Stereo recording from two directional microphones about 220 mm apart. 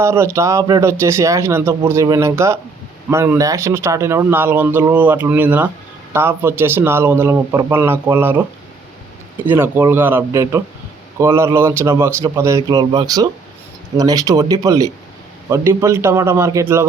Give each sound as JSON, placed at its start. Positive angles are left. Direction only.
{"t": 0.0, "sound": "speech", "side_deg": -10}
{"t": 9.5, "sound": "speech", "side_deg": -10}